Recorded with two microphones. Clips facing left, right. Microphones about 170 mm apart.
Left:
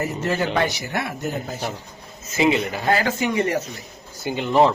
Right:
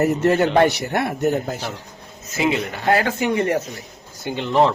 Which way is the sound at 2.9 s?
60° right (ahead or behind).